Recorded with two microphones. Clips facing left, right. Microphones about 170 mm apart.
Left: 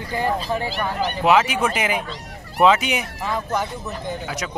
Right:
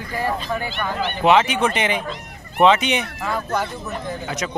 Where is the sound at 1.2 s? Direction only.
5° left (ahead or behind).